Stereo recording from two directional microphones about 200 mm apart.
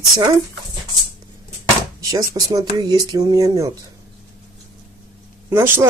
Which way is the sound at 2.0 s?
15° right (ahead or behind).